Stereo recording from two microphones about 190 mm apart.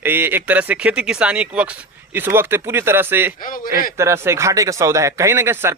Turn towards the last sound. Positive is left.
turn(degrees=-15)  # may be behind; listen again after turning